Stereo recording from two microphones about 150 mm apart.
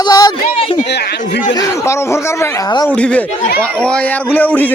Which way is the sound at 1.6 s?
20° left (ahead or behind).